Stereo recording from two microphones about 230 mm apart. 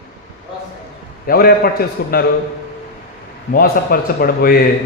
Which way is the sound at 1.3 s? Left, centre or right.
Left.